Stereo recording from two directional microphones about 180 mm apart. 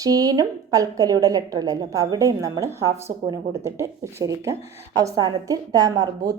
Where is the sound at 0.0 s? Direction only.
20° right (ahead or behind).